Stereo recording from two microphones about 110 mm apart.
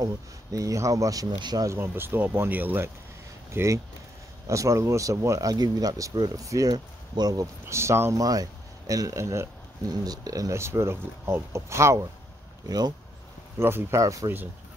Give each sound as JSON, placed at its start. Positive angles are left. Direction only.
{"t": 0.0, "sound": "speech", "side_deg": -30}
{"t": 1.7, "sound": "speech", "side_deg": -20}
{"t": 7.6, "sound": "speech", "side_deg": -25}
{"t": 12.6, "sound": "speech", "side_deg": -40}
{"t": 13.6, "sound": "speech", "side_deg": -20}